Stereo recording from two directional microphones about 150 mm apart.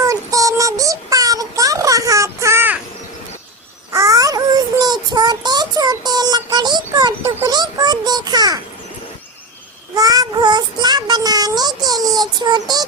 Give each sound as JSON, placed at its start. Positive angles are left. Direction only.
{"t": 0.0, "sound": "child singing", "side_deg": -20}
{"t": 3.9, "sound": "child singing", "side_deg": -20}
{"t": 7.4, "sound": "a sound", "side_deg": -25}
{"t": 9.9, "sound": "child singing", "side_deg": -25}